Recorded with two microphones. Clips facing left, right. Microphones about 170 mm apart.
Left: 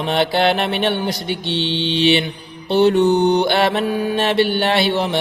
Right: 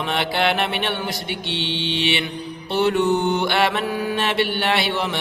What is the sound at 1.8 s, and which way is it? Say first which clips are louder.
Mantra: left 8 dB; 30° left (ahead or behind).